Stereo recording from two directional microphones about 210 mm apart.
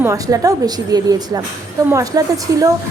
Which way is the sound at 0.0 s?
15° right (ahead or behind).